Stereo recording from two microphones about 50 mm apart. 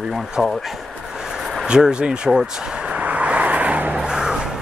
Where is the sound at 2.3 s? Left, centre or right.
Centre.